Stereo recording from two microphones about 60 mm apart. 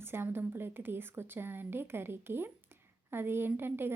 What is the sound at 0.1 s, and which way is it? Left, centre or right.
A woman's voice, right.